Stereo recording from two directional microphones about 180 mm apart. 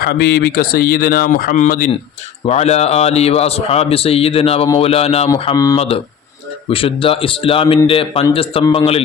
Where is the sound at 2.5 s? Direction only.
35° left (ahead or behind).